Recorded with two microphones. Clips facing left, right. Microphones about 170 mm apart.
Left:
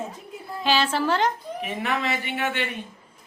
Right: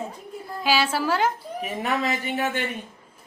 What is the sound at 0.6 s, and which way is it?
Speech, 10° right (ahead or behind).